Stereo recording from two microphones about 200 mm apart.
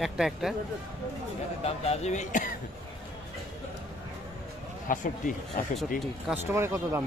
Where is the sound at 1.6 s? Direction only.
35° left (ahead or behind).